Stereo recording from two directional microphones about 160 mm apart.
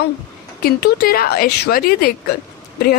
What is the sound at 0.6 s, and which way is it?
A woman's voice, 75° left (ahead or behind).